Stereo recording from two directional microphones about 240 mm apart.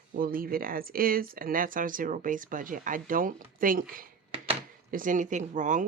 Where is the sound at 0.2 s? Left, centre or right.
Right.